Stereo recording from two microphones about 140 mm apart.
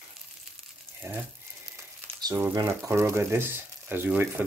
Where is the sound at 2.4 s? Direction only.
20° right (ahead or behind).